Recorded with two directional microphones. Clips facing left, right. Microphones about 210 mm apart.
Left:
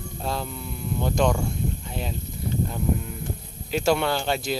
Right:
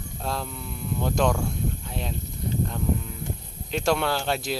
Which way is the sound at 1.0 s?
Centre (ahead or behind).